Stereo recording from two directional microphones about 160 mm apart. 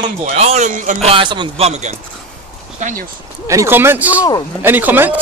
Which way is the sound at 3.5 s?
15° right (ahead or behind).